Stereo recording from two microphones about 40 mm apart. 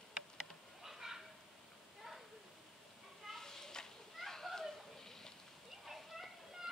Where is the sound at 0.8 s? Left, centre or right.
Centre.